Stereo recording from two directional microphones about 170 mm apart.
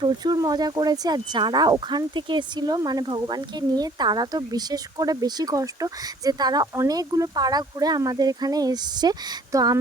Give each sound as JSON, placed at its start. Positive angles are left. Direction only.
{"t": 0.0, "sound": "speech", "side_deg": -25}